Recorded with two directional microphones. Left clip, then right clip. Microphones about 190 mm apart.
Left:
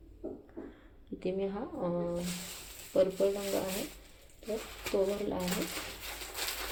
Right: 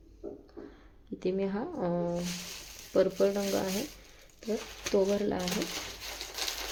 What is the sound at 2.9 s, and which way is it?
Speech, 30° right (ahead or behind).